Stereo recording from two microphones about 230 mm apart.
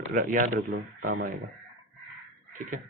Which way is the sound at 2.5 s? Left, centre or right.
Right.